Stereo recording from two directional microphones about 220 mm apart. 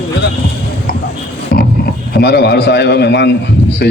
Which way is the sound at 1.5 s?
40° left (ahead or behind).